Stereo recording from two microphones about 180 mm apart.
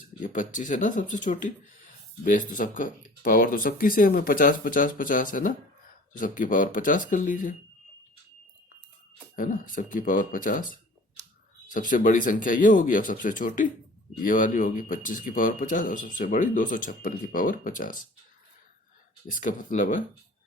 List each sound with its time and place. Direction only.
0.2 s speech: 45° left (ahead or behind)
9.3 s speech: 50° left (ahead or behind)
19.3 s speech: 50° left (ahead or behind)